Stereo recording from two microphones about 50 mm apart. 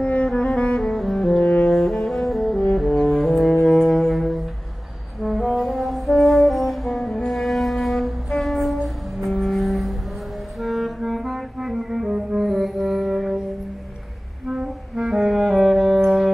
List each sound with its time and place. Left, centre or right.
0.0 s music: left
1.0 s saxophone: centre
1.4 s saxophone: left
1.7 s double bass: centre
2.8 s brass instrument: centre
3.7 s music: centre
5.2 s brass instrument: centre
7.2 s music: centre
14.5 s clarinet: centre
15.3 s music: centre